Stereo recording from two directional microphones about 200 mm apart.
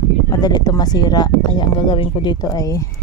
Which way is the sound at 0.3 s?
20° left (ahead or behind).